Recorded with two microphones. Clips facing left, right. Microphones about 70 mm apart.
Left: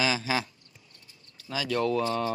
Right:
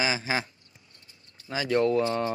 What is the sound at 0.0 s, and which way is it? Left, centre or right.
Speech, right.